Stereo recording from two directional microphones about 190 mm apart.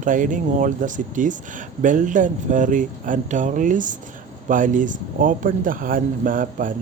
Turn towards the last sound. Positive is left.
turn(degrees=-45)  # may be behind; listen again after turning